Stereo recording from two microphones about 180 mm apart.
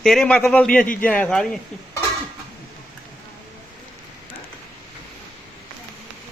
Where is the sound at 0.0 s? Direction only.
5° left (ahead or behind).